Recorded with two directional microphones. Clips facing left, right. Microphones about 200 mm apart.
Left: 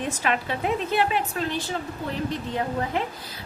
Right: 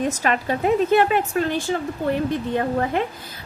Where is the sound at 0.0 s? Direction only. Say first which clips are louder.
Right 4 dB; 40° right (ahead or behind).